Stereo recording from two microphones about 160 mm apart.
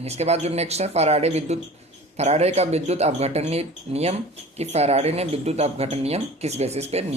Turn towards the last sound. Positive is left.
turn(degrees=-40)  # may be behind; listen again after turning